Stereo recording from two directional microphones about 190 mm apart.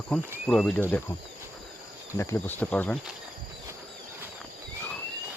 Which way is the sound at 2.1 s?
10° left (ahead or behind).